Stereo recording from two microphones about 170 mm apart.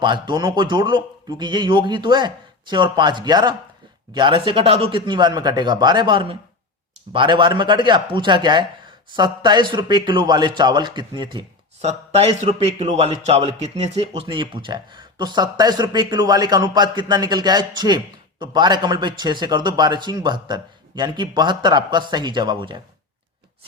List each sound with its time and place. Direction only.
0.0 s speech: 25° right (ahead or behind)